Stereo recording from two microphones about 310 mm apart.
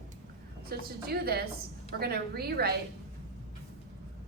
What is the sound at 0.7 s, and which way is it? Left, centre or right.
A woman's voice, right.